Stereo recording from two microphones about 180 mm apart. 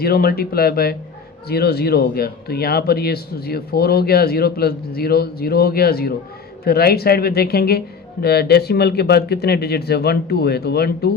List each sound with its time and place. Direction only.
0.0 s speech: 60° left (ahead or behind)